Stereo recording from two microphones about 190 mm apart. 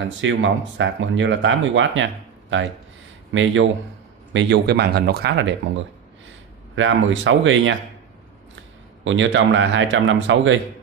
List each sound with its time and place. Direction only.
0.0 s speech: 80° right
4.3 s speech: 70° right (ahead or behind)
6.2 s speech: 80° right
9.0 s speech: 80° right